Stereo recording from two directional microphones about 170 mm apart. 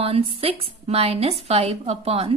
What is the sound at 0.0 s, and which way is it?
Speech, 35° right (ahead or behind).